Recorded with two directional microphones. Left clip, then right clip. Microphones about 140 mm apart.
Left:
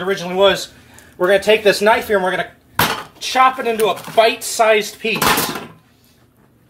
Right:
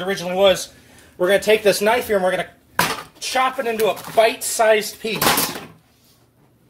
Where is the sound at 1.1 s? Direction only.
30° right (ahead or behind).